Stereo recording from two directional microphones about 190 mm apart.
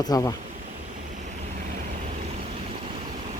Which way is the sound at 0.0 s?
20° left (ahead or behind).